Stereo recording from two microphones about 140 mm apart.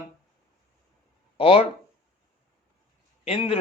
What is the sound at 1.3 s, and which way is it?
Speech, 40° left (ahead or behind).